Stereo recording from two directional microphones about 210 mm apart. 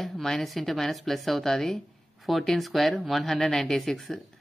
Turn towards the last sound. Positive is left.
turn(degrees=0)  # may be behind; listen again after turning